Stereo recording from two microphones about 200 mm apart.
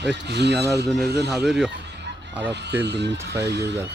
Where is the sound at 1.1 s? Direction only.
Centre (ahead or behind).